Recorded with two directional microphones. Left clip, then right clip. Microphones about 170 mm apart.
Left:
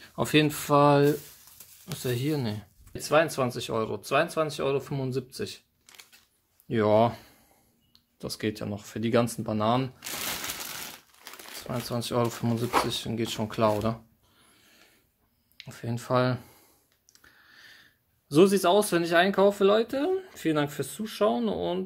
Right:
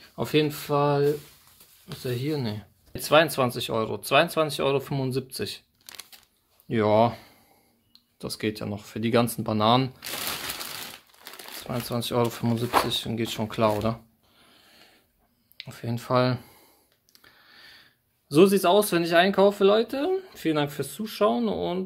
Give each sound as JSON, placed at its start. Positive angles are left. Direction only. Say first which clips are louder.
{"t": 0.0, "sound": "speech", "louder": "even", "side_deg": 20}
{"t": 3.0, "sound": "speech", "louder": "right 4 dB", "side_deg": -15}
{"t": 5.9, "sound": "a sound", "louder": "right 7 dB", "side_deg": -55}
{"t": 6.7, "sound": "speech", "louder": "right 1 dB", "side_deg": 0}
{"t": 11.6, "sound": "speech", "louder": "right 2 dB", "side_deg": 0}
{"t": 17.1, "sound": "a sound", "louder": "right 2 dB", "side_deg": 0}
{"t": 18.3, "sound": "speech", "louder": "right 2 dB", "side_deg": 0}